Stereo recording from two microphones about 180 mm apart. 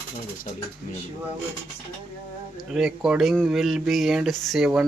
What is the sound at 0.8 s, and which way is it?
Speech, 45° left (ahead or behind).